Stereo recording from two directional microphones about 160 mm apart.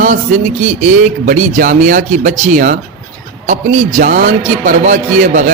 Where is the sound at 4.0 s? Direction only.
55° right (ahead or behind).